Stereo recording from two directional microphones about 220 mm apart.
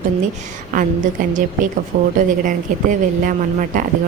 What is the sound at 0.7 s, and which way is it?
A woman's voice, 35° right (ahead or behind).